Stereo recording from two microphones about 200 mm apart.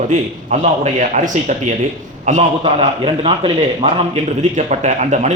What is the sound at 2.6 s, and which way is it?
A man's voice, 25° right (ahead or behind).